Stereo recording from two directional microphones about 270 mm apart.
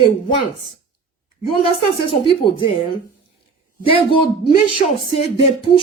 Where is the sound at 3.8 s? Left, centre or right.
Centre.